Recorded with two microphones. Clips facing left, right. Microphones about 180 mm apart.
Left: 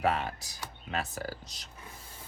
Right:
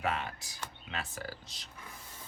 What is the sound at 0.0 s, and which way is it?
Speech, 35° left (ahead or behind).